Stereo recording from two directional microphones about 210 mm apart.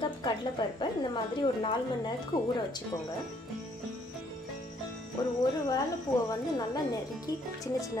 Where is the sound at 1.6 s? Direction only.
20° left (ahead or behind).